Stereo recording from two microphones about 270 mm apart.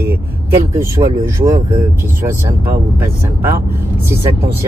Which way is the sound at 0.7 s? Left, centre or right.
Centre.